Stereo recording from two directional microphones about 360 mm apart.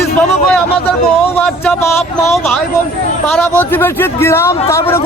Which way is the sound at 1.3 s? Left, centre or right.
Centre.